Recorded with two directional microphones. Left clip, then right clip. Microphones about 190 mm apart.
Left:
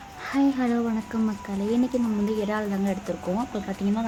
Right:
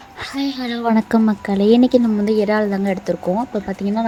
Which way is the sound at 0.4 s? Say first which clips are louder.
Even; 40° right (ahead or behind).